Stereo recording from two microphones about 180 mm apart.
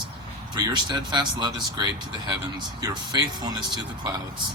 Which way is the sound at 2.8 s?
20° right (ahead or behind).